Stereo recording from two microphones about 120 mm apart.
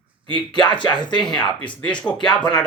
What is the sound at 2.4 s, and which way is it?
Speech, 35° left (ahead or behind).